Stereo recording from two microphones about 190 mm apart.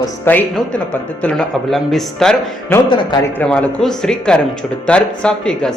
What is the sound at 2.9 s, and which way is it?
Speech, 25° left (ahead or behind).